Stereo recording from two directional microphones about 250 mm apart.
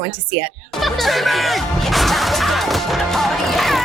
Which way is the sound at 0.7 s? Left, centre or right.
Centre.